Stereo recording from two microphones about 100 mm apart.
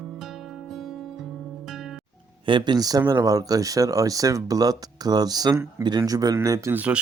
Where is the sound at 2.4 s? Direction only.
55° right (ahead or behind).